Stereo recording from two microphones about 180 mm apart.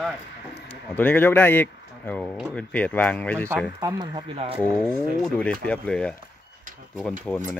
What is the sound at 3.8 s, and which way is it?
Speech, 25° right (ahead or behind).